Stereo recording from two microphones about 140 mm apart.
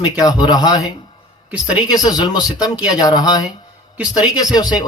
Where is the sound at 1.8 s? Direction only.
30° left (ahead or behind).